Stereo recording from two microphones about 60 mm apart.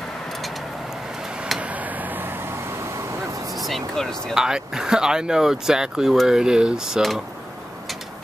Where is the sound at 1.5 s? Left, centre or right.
Right.